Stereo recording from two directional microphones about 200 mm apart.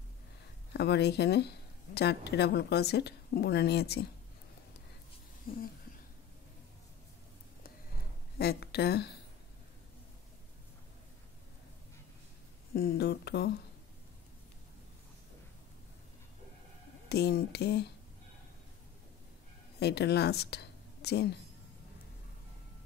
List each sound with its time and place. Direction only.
0.7 s speech: 55° left (ahead or behind)
5.5 s a woman's voice: 45° left (ahead or behind)
8.4 s a woman's voice: 55° left (ahead or behind)
12.7 s speech: 55° left (ahead or behind)
17.1 s speech: 55° left (ahead or behind)
19.8 s a woman's voice: 55° left (ahead or behind)